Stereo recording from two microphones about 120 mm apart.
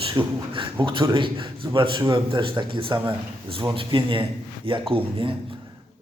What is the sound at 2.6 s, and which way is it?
Mantra, 45° right (ahead or behind).